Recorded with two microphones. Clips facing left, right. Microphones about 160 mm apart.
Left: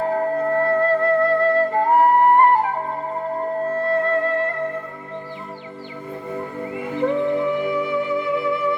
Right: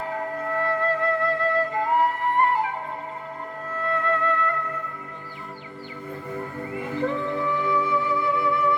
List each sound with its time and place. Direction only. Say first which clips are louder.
0.0 s music: left 9 dB; 45° left (ahead or behind)
6.7 s music: left 5 dB; 20° left (ahead or behind)